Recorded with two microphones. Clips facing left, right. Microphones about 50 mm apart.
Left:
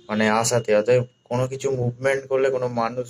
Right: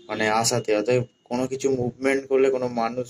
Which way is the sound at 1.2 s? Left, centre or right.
Left.